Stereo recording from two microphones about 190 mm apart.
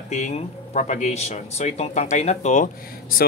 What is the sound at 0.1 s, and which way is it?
Speech, 35° left (ahead or behind).